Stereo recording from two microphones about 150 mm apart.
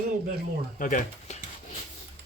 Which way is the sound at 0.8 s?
60° left (ahead or behind).